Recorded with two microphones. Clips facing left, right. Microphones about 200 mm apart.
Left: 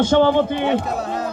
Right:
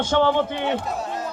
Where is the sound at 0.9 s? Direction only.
65° left (ahead or behind).